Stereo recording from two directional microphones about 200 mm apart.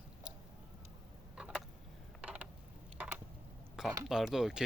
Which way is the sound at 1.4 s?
5° right (ahead or behind).